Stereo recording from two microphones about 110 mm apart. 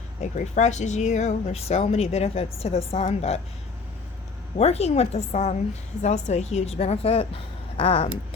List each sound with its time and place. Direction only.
0.2 s speech: 90° left; by 3.4 s 75° left (ahead or behind)
4.5 s speech: 75° left (ahead or behind)